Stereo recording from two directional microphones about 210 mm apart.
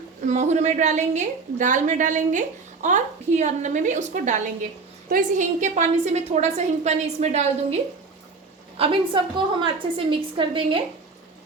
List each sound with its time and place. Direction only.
0.3 s a woman's voice: 35° right (ahead or behind)
8.8 s a woman's voice: 25° right (ahead or behind)